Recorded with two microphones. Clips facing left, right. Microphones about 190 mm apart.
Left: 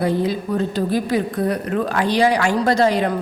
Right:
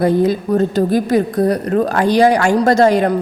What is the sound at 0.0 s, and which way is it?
A woman's voice, 45° right (ahead or behind).